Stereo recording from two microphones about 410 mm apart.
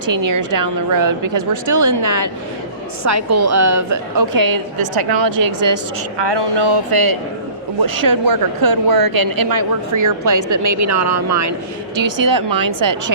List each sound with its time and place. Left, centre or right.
0.3 s a woman's voice: right
5.4 s a woman's voice: right
5.7 s a woman's voice: right
12.2 s a woman's voice: right